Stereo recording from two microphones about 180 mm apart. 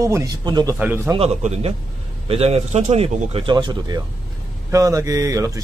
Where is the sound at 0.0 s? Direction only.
20° right (ahead or behind).